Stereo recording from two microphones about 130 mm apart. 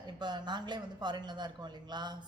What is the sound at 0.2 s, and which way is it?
Speech, 35° right (ahead or behind).